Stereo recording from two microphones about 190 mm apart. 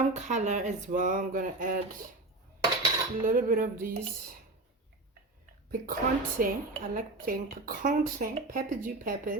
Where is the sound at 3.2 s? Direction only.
45° right (ahead or behind).